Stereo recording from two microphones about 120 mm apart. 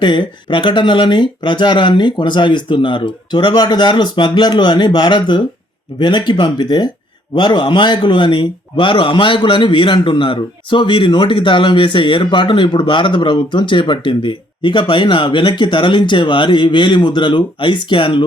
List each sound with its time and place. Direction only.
0.0 s a man's voice: 40° left (ahead or behind)